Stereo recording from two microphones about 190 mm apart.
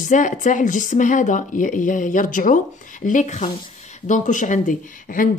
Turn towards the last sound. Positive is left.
turn(degrees=45)  # may be behind; listen again after turning